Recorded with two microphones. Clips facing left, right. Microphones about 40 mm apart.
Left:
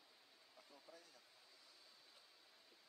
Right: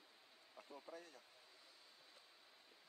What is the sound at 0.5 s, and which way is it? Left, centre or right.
Speech, right.